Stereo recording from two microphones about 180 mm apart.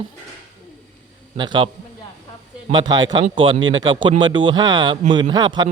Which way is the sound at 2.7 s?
25° right (ahead or behind).